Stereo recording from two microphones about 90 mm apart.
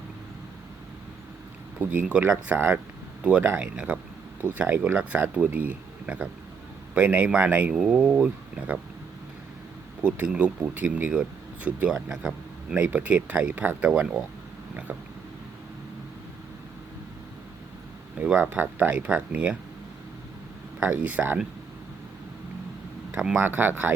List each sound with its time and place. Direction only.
1.8 s speech: 20° right (ahead or behind)
7.8 s speech: 5° right (ahead or behind)
8.0 s speech: 15° right (ahead or behind)
10.0 s speech: 10° right (ahead or behind)
18.3 s speech: 20° right (ahead or behind)
20.8 s speech: 15° right (ahead or behind)
23.1 s speech: 10° right (ahead or behind)
23.4 s speech: 20° right (ahead or behind)